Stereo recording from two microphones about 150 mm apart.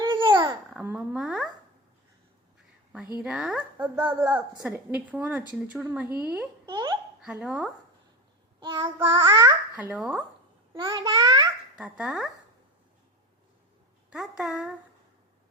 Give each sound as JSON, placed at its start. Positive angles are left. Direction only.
{"t": 0.0, "sound": "babbling", "side_deg": -30}
{"t": 0.9, "sound": "speech", "side_deg": -5}
{"t": 3.2, "sound": "a woman's voice", "side_deg": -5}
{"t": 6.7, "sound": "a child's voice", "side_deg": -30}
{"t": 7.2, "sound": "a woman's voice", "side_deg": -5}
{"t": 8.6, "sound": "a child's voice", "side_deg": -35}
{"t": 9.9, "sound": "speech", "side_deg": -5}
{"t": 10.8, "sound": "a child's voice", "side_deg": -35}
{"t": 11.8, "sound": "speech", "side_deg": -5}
{"t": 14.1, "sound": "speech", "side_deg": -5}